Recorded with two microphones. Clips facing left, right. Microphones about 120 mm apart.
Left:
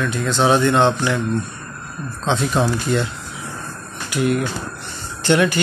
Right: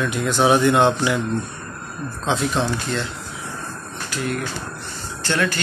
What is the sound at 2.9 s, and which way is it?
Speech, 15° left (ahead or behind).